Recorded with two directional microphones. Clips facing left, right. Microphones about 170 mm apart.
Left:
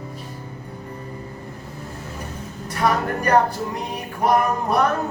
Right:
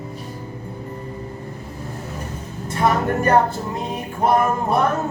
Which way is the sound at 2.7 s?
25° right (ahead or behind).